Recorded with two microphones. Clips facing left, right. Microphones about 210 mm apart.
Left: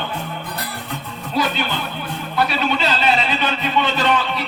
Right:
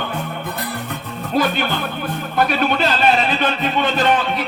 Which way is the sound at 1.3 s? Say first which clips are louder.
Right 3 dB; 50° right (ahead or behind).